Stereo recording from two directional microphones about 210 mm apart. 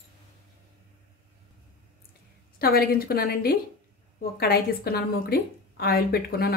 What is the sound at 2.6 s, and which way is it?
A woman's voice, 45° left (ahead or behind).